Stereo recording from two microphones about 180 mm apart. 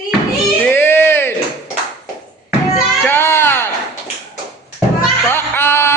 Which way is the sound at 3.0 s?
15° left (ahead or behind).